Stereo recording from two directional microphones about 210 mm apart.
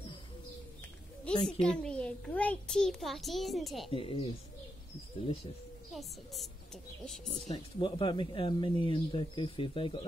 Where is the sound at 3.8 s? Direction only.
25° left (ahead or behind).